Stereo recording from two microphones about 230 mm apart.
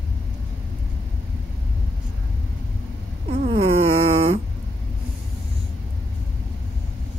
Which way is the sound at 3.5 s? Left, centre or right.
Right.